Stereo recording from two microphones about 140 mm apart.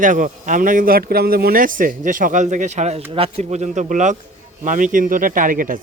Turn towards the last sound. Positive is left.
turn(degrees=-75)  # may be behind; listen again after turning